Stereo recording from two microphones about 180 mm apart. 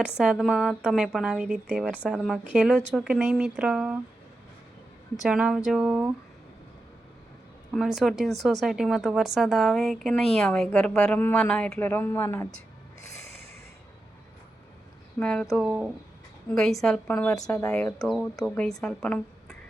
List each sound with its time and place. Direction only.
0.2 s speech: centre (ahead or behind)
5.2 s speech: 5° right (ahead or behind)
7.7 s speech: centre (ahead or behind)
15.2 s speech: 5° left (ahead or behind)
17.3 s speech: 20° left (ahead or behind)
17.7 s a woman's voice: 5° left (ahead or behind)